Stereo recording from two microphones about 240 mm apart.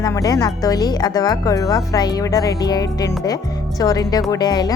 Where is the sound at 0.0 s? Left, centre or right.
Centre.